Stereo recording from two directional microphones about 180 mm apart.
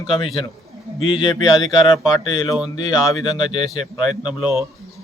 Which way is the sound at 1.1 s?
25° left (ahead or behind).